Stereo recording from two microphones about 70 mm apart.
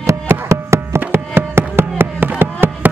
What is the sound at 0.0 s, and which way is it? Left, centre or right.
Music, right.